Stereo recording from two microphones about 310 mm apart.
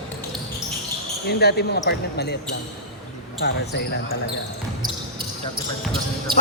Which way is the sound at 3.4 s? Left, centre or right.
Left.